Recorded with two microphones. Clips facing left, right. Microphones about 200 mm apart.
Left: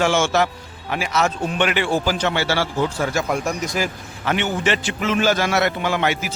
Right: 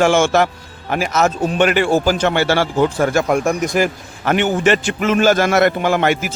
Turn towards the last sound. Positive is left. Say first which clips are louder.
# right 5 dB
turn(degrees=-50)  # may be behind; listen again after turning